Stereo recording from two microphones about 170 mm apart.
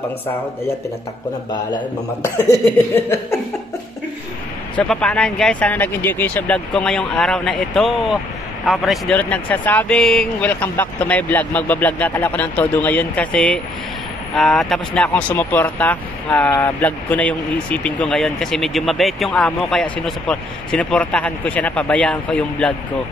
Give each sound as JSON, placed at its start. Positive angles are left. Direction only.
{"t": 2.2, "sound": "speech", "side_deg": 15}
{"t": 4.7, "sound": "speech", "side_deg": 5}